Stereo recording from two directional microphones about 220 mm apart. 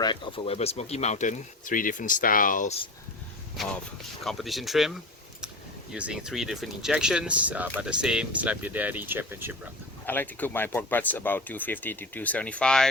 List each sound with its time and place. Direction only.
0.0 s speech: 20° left (ahead or behind); by 2.7 s 35° left (ahead or behind)
4.2 s speech: centre (ahead or behind)
10.1 s speech: 10° left (ahead or behind)